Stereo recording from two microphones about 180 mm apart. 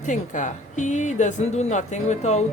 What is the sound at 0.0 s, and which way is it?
A woman's voice, 45° left (ahead or behind).